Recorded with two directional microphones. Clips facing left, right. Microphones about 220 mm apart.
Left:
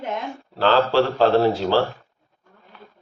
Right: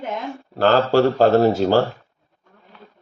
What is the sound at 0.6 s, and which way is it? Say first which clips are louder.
A man's voice: right 2 dB; 45° right (ahead or behind).